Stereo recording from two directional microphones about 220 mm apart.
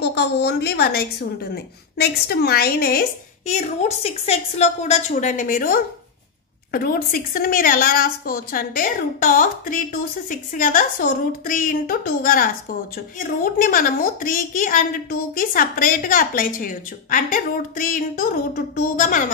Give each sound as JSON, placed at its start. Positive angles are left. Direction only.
{"t": 0.0, "sound": "a woman's voice", "side_deg": 50}
{"t": 3.4, "sound": "a woman's voice", "side_deg": 30}